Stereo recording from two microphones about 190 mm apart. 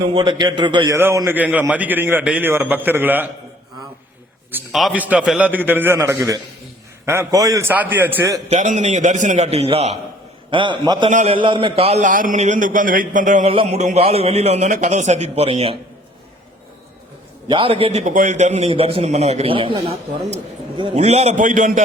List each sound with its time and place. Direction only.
0.0 s a man's voice: 25° right (ahead or behind)
0.9 s a man's voice: 15° right (ahead or behind)
4.5 s a man's voice: 5° right (ahead or behind)
8.4 s a man's voice: 40° right (ahead or behind)
11.1 s a man's voice: 40° right (ahead or behind)
11.3 s a man's voice: 25° right (ahead or behind); by 13.5 s 40° right (ahead or behind)
13.5 s a man's voice: 30° right (ahead or behind)
17.5 s a man's voice: 30° right (ahead or behind)